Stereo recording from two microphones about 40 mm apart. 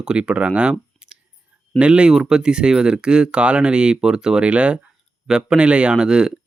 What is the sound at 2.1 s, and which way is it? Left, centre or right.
Speech, centre.